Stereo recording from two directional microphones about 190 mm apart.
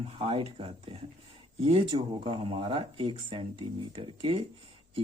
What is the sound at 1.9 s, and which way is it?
Speech, 25° right (ahead or behind).